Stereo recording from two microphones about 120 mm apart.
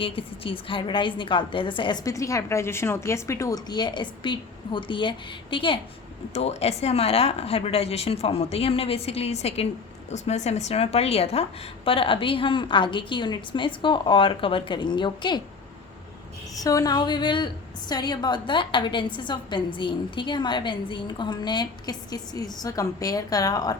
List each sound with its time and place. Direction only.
0.0 s a woman's voice: 45° left (ahead or behind)
2.0 s a woman's voice: 25° left (ahead or behind); by 5.8 s 45° left (ahead or behind)
6.3 s a woman's voice: 60° left (ahead or behind); by 15.4 s 40° left (ahead or behind)
16.6 s a woman's voice: 30° left (ahead or behind)